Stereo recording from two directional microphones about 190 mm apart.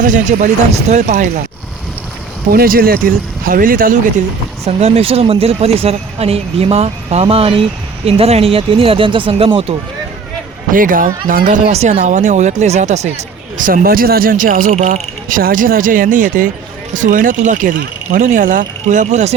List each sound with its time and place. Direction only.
0.0 s speech: 40° right (ahead or behind)
2.5 s speech: 50° right (ahead or behind)
4.6 s speech: 35° right (ahead or behind)
10.7 s speech: 45° right (ahead or behind)